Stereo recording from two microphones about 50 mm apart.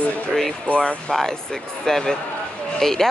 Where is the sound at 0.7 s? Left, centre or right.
Left.